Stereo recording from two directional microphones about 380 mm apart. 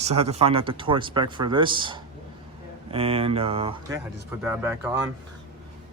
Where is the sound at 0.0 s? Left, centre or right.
Centre.